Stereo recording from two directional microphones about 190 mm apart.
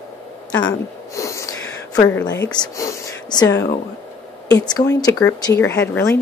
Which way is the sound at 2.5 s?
20° left (ahead or behind).